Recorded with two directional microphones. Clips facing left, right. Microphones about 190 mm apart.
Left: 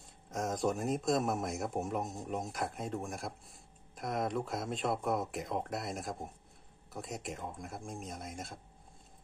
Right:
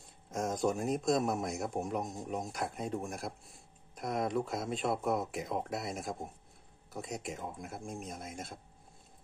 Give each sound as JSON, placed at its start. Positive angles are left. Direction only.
{"t": 0.3, "sound": "a man's voice", "side_deg": 0}